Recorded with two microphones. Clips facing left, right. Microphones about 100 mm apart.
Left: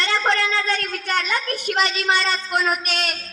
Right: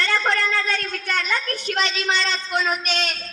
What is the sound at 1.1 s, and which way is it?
A woman's voice, 20° left (ahead or behind).